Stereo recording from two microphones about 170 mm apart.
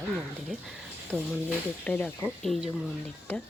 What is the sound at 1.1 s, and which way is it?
Speech, 5° left (ahead or behind).